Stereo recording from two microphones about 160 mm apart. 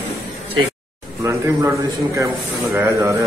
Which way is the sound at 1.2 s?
20° right (ahead or behind).